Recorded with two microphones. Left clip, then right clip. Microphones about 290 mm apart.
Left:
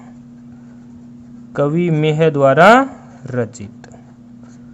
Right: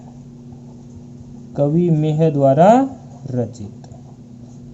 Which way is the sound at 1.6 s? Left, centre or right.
Left.